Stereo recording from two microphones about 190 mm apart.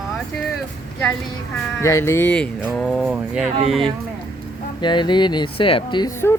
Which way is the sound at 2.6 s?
Centre (ahead or behind).